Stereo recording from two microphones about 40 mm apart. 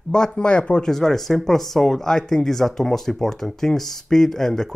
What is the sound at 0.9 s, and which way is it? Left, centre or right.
Speech, centre.